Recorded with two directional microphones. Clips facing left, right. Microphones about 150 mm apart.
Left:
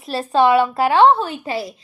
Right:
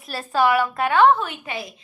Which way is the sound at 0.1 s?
25° left (ahead or behind).